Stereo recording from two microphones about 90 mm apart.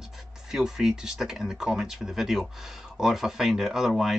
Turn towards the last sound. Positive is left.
turn(degrees=-5)  # may be behind; listen again after turning